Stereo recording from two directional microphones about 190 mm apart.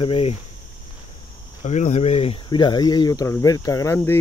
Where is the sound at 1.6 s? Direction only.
40° left (ahead or behind).